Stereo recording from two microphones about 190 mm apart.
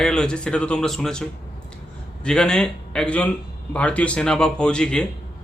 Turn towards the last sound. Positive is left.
turn(degrees=5)  # may be behind; listen again after turning